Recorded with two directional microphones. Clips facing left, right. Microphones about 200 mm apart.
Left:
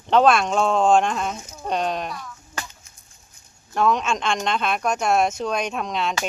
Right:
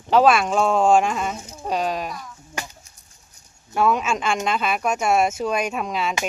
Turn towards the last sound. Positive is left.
turn(degrees=-5)  # may be behind; listen again after turning